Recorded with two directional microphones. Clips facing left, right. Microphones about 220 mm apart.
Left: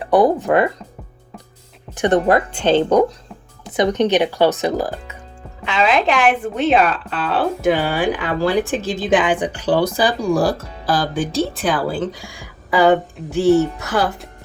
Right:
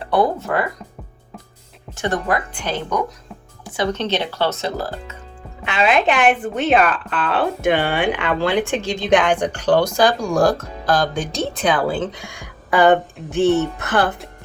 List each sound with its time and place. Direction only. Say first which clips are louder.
0.0 s speech: left 4 dB; 15° left (ahead or behind)
2.0 s speech: left 7 dB; 20° left (ahead or behind)
5.7 s speech: even; 5° right (ahead or behind)